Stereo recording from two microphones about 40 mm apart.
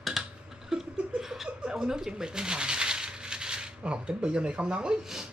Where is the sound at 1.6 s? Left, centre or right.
Centre.